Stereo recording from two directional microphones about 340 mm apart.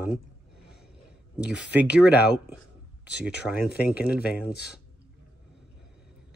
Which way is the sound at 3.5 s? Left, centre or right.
Left.